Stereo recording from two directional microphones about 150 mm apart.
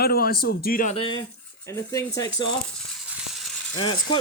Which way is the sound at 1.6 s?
20° left (ahead or behind).